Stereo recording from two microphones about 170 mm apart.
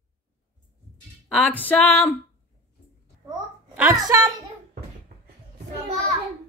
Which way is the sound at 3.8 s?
15° right (ahead or behind).